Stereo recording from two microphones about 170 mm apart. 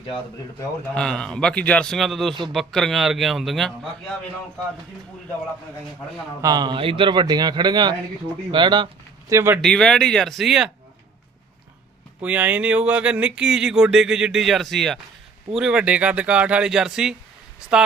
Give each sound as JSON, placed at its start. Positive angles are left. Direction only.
{"t": 0.9, "sound": "speech", "side_deg": 5}
{"t": 6.4, "sound": "speech", "side_deg": -25}
{"t": 9.3, "sound": "speech", "side_deg": -15}
{"t": 9.6, "sound": "speech", "side_deg": 5}
{"t": 12.2, "sound": "speech", "side_deg": -10}